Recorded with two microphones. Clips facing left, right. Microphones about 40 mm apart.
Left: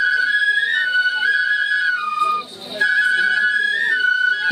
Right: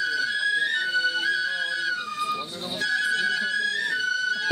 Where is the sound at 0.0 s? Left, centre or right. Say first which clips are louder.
Left 9 dB; left.